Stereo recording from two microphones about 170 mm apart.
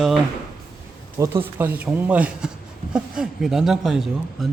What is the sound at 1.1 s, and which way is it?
Speech, 15° right (ahead or behind).